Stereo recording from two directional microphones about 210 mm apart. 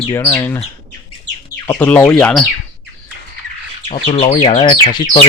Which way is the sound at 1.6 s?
10° left (ahead or behind).